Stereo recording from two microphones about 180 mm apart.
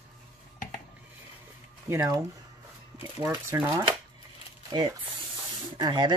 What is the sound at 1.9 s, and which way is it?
Speech, 20° right (ahead or behind).